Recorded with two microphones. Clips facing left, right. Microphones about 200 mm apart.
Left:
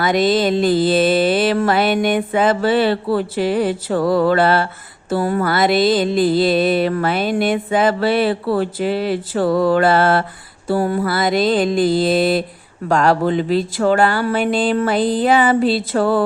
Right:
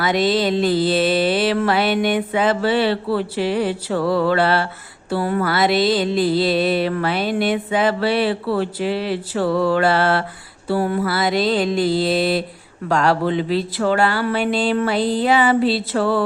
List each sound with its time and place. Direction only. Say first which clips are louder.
0.0 s mantra: left 2 dB; 50° left (ahead or behind)